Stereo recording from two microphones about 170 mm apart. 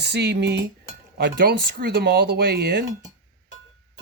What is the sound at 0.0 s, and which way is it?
Cutlery, 75° right (ahead or behind).